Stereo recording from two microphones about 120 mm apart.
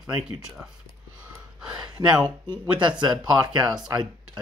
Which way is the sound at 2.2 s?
40° right (ahead or behind).